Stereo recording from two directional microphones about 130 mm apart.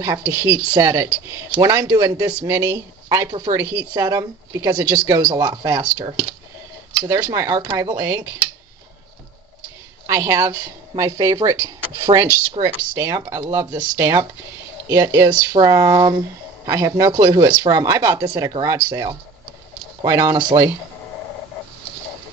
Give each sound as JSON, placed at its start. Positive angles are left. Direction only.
{"t": 0.0, "sound": "speech", "side_deg": -25}
{"t": 7.3, "sound": "speech", "side_deg": -30}
{"t": 10.0, "sound": "speech", "side_deg": -20}